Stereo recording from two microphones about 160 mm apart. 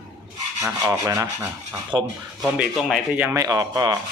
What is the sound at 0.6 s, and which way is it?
Rub, 20° right (ahead or behind).